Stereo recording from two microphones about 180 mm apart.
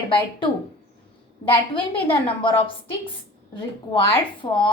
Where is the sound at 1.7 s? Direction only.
30° left (ahead or behind).